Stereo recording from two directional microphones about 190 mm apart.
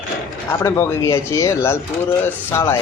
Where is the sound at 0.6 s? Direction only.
15° left (ahead or behind).